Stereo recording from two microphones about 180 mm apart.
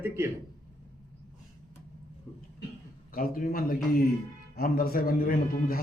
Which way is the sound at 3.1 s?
55° left (ahead or behind).